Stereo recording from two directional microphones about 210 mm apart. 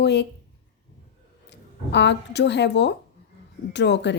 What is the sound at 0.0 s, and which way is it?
Speech, 50° left (ahead or behind).